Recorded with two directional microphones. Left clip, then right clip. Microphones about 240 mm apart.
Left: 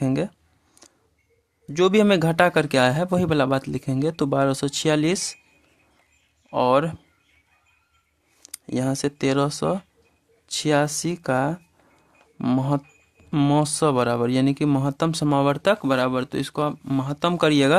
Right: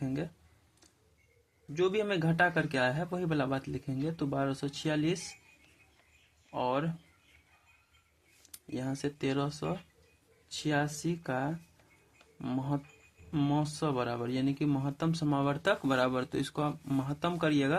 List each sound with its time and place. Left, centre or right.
0.0 s a sound: left
0.8 s camera: left
1.7 s speech: left
6.5 s speech: left
8.5 s speech: left